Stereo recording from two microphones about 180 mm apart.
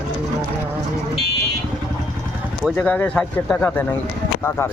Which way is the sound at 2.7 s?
10° left (ahead or behind).